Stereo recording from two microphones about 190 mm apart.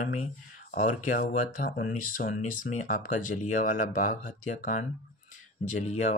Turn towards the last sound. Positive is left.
turn(degrees=40)  # may be behind; listen again after turning